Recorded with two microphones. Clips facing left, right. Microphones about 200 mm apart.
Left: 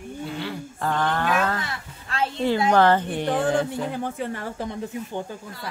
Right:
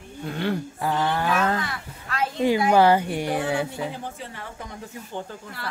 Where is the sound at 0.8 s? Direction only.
10° right (ahead or behind).